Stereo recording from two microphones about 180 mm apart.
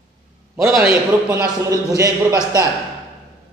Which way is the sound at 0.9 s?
15° right (ahead or behind).